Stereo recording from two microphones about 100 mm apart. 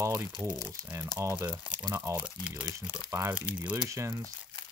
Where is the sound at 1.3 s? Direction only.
20° right (ahead or behind).